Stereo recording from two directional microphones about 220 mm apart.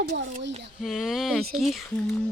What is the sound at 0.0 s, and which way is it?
Speech, 45° right (ahead or behind).